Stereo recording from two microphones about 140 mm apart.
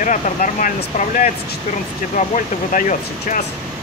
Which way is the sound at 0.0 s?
65° left (ahead or behind).